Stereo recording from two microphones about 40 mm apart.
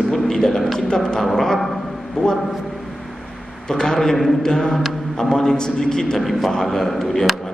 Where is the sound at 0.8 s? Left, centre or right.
Centre.